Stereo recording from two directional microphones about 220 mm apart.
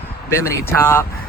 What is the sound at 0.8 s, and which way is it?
Speech, 10° left (ahead or behind).